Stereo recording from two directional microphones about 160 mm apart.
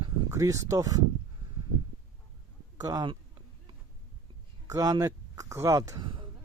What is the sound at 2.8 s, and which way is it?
Speech, 25° right (ahead or behind).